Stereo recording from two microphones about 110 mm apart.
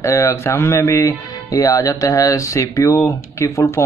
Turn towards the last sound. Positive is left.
turn(degrees=25)  # may be behind; listen again after turning